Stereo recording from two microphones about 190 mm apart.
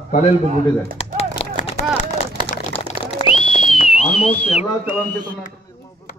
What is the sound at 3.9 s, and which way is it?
Speech, 30° left (ahead or behind).